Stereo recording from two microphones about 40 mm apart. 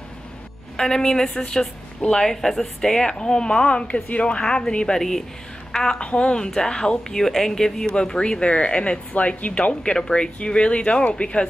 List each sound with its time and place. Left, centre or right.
0.7 s a woman's voice: centre
5.9 s a woman's voice: left
9.9 s a woman's voice: centre